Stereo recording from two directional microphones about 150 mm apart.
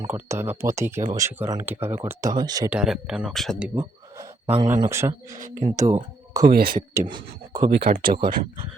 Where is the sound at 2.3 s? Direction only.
25° right (ahead or behind).